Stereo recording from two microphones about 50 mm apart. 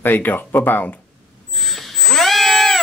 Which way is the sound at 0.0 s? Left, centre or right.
Left.